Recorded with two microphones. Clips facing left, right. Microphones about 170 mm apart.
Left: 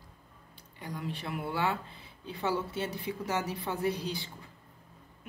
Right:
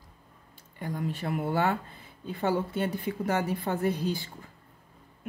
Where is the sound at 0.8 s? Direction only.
50° right (ahead or behind).